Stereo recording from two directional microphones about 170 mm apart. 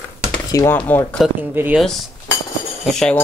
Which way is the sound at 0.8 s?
10° left (ahead or behind).